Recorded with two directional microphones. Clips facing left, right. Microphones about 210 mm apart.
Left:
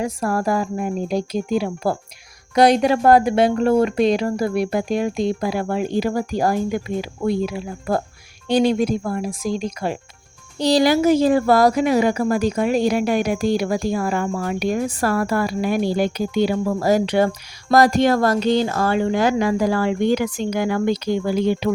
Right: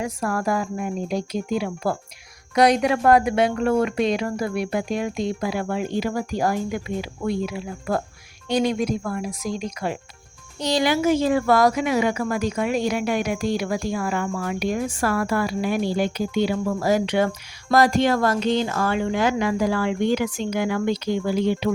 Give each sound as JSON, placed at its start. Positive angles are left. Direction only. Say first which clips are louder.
{"t": 0.0, "sound": "speech", "louder": "left 3 dB", "side_deg": 35}